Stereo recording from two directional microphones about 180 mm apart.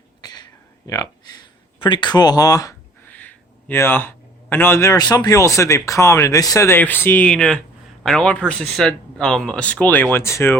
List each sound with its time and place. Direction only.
0.2 s a sound: 20° left (ahead or behind)
0.9 s speech: 20° left (ahead or behind)
3.1 s speech: 10° left (ahead or behind)